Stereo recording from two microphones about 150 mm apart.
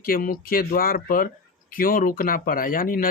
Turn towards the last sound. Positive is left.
turn(degrees=70)  # may be behind; listen again after turning